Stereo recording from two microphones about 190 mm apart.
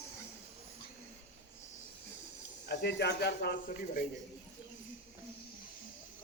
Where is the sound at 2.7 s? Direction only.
60° left (ahead or behind).